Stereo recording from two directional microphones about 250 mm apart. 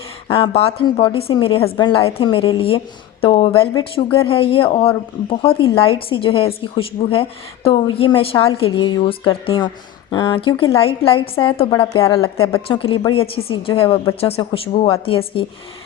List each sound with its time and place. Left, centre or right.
0.3 s a woman's voice: left